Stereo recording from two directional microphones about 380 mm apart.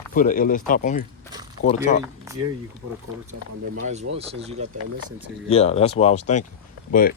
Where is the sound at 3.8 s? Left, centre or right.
Centre.